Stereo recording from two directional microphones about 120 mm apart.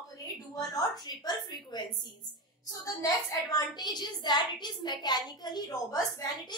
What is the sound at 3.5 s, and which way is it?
A woman's voice, 35° left (ahead or behind).